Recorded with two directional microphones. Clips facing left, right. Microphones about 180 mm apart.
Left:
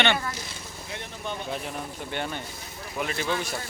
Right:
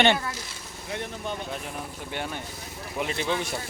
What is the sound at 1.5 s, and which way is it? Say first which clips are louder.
Speech: left 2 dB; 5° right (ahead or behind).